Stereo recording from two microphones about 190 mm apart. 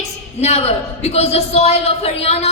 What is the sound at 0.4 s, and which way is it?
A man's voice, 35° left (ahead or behind).